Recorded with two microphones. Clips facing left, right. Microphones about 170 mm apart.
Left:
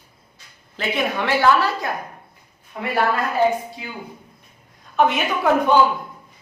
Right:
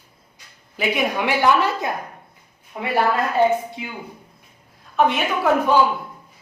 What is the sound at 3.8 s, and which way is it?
Speech, 20° right (ahead or behind).